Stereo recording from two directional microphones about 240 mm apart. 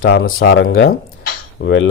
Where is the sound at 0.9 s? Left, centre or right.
Left.